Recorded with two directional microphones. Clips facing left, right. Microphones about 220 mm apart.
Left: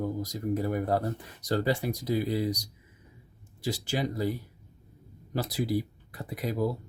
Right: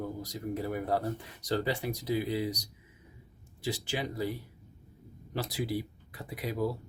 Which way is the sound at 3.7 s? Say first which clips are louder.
Left 4 dB; 40° left (ahead or behind).